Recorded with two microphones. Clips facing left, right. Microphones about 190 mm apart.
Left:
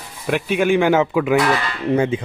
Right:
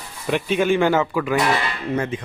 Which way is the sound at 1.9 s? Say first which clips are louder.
Left 7 dB; 25° left (ahead or behind).